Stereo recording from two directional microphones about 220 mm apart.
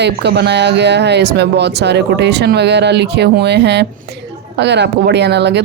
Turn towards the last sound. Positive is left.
turn(degrees=-50)  # may be behind; listen again after turning